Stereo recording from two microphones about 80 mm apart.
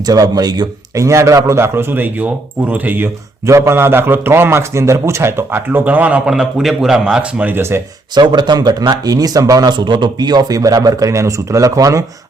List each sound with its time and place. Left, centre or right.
0.0 s speech: right
0.9 s a man's voice: right
3.4 s a man's voice: right; by 7.5 s centre
7.5 s a man's voice: right
8.1 s speech: right
9.7 s speech: right